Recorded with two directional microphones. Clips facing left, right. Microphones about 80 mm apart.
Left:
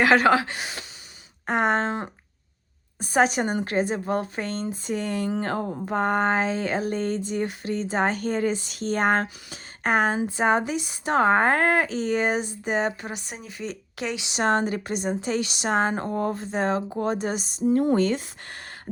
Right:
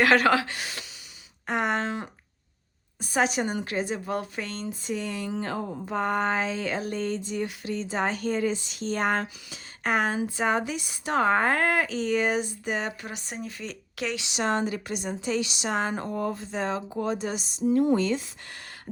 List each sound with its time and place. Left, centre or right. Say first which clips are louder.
0.0 s speech: left 2 dB; left
1.5 s speech: left 4 dB; left
7.0 s speech: left 3 dB; left
13.2 s speech: right 3 dB; centre
13.6 s speech: left 2 dB; left
14.3 s a woman's voice: left 4 dB; left